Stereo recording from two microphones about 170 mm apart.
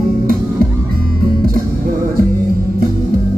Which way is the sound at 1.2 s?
60° right (ahead or behind).